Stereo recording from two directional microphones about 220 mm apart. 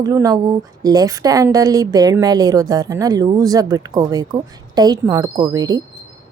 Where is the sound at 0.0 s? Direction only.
15° right (ahead or behind).